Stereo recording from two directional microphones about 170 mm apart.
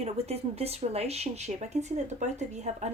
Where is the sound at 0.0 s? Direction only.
35° right (ahead or behind).